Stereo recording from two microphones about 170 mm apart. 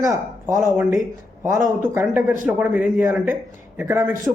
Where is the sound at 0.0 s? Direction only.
15° right (ahead or behind).